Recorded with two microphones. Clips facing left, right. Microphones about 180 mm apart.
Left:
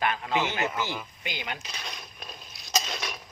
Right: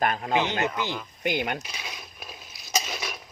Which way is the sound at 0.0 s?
45° right (ahead or behind).